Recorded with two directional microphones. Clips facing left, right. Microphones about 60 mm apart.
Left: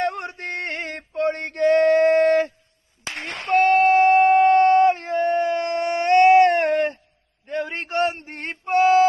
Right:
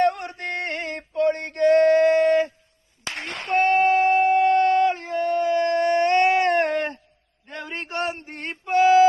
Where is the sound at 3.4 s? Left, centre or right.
Left.